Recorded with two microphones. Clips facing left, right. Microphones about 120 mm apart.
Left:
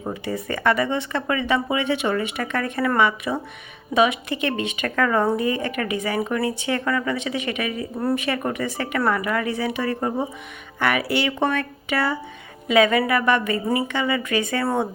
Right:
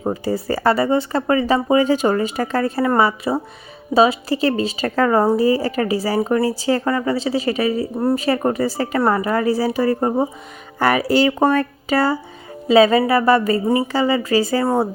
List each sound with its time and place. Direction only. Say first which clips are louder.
0.0 s a woman's voice: right 6 dB; 35° right (ahead or behind)